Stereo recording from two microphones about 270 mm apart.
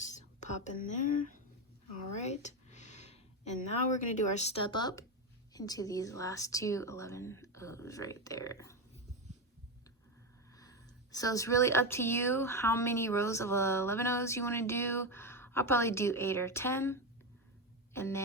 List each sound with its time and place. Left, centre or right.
0.0 s whispering: left
2.1 s a sound: left
3.9 s speech: left; by 8.7 s centre
10.6 s speech: centre
17.9 s music: centre